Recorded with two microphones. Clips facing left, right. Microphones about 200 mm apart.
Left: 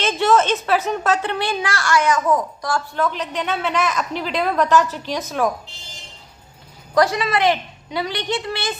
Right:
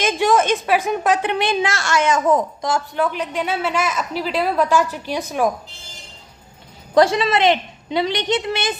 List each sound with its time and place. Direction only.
0.0 s a woman's voice: 15° right (ahead or behind)
6.9 s a woman's voice: 25° right (ahead or behind)